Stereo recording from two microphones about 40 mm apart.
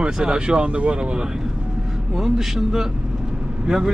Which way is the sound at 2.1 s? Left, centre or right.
Centre.